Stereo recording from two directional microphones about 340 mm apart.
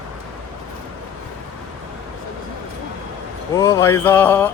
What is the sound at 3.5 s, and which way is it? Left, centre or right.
Speech, centre.